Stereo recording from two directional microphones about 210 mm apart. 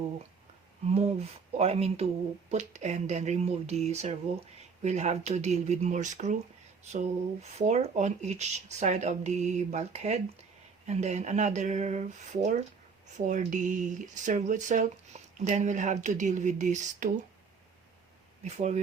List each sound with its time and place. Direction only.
0.9 s speech: 30° right (ahead or behind)
18.4 s speech: 35° right (ahead or behind)